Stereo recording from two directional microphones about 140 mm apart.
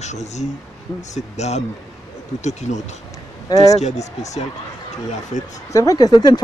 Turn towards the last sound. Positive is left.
turn(degrees=30)  # may be behind; listen again after turning